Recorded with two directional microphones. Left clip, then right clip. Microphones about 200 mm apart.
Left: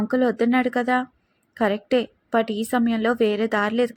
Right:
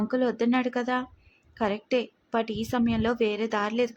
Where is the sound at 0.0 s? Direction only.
15° left (ahead or behind).